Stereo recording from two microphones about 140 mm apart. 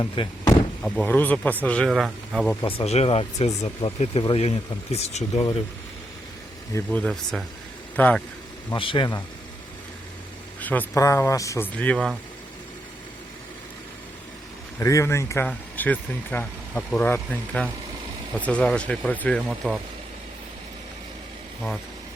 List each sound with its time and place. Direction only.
0.0 s speech: 30° left (ahead or behind)
0.8 s speech: 10° left (ahead or behind)
2.0 s speech: 5° right (ahead or behind)
2.6 s speech: 45° left (ahead or behind)
6.7 s speech: 10° left (ahead or behind)
8.7 s speech: 35° left (ahead or behind)
10.6 s a sound: 10° left (ahead or behind)
10.9 s speech: 20° left (ahead or behind)
14.8 s speech: 20° left (ahead or behind)
19.5 s speech: 5° right (ahead or behind)